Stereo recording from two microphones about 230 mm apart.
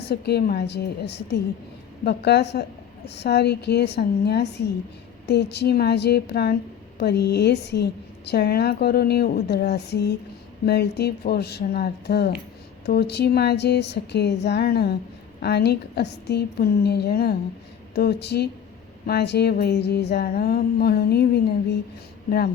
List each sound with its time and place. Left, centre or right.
0.0 s a woman's voice: left